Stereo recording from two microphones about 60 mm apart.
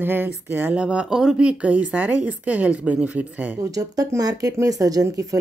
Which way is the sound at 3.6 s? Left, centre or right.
Right.